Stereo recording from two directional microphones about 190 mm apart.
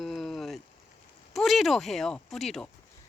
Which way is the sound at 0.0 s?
Centre (ahead or behind).